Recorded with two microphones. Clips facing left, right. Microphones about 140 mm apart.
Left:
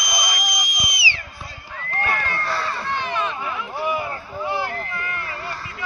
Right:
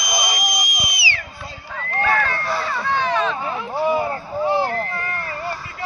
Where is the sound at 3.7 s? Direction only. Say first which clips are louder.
Right 6 dB; 30° right (ahead or behind).